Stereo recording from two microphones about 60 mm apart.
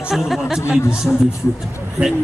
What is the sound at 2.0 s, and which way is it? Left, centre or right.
Speech, right.